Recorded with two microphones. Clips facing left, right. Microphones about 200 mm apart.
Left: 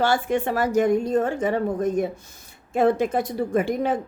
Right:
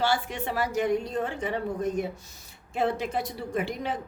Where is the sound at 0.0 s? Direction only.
50° left (ahead or behind).